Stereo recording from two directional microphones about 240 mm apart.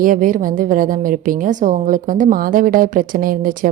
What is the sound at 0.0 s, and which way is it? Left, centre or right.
Speech, right.